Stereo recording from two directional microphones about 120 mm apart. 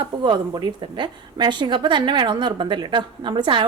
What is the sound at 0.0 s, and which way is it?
A woman's voice, 40° right (ahead or behind).